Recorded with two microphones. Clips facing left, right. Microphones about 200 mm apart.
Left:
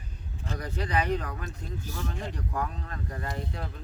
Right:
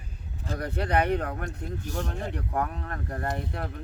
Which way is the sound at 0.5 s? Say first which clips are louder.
Right 4 dB; 60° right (ahead or behind).